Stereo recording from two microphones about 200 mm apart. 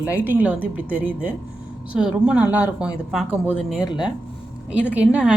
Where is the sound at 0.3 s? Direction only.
10° right (ahead or behind).